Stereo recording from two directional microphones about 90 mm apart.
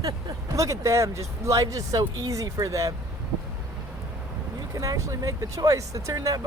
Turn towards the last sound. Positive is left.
turn(degrees=-40)  # may be behind; listen again after turning